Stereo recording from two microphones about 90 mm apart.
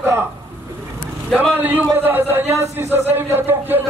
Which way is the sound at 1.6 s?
20° right (ahead or behind).